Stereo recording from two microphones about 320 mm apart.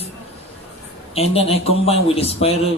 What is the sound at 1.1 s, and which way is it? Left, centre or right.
Speech, centre.